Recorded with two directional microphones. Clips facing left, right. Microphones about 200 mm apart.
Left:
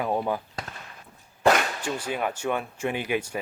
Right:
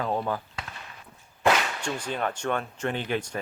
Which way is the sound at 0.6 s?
40° left (ahead or behind).